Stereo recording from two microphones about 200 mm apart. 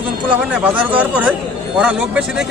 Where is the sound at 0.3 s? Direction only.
5° right (ahead or behind).